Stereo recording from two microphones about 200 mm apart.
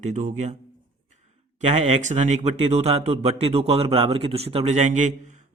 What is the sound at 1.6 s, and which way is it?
Speech, 35° right (ahead or behind).